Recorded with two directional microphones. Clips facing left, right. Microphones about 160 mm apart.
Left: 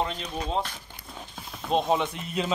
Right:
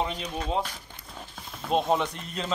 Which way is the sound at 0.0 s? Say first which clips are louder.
Even; 10° right (ahead or behind).